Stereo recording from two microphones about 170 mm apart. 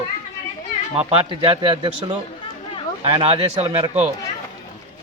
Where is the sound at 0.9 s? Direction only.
30° right (ahead or behind).